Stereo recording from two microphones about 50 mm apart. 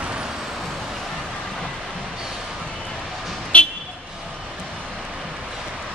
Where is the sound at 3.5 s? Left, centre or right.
Left.